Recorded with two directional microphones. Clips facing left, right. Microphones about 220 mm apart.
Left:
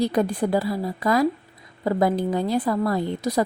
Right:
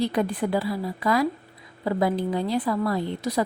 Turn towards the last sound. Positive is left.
turn(degrees=45)  # may be behind; listen again after turning